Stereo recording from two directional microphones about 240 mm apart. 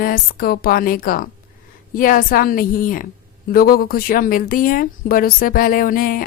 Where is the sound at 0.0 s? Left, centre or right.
Left.